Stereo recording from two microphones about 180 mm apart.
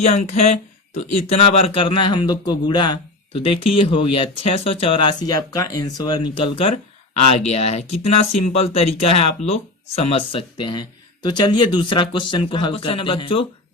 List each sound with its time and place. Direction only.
0.0 s speech: 35° left (ahead or behind)